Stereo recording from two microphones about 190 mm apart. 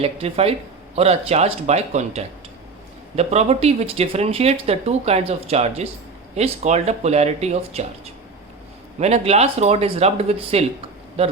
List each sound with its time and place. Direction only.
0.0 s speech: 30° right (ahead or behind)